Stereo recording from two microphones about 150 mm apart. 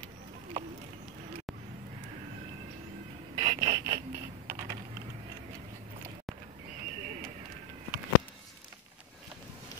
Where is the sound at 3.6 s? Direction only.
25° right (ahead or behind).